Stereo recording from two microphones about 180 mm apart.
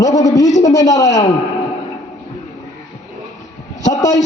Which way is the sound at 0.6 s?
20° left (ahead or behind).